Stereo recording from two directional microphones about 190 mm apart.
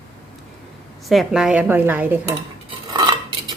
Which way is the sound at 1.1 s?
Centre (ahead or behind).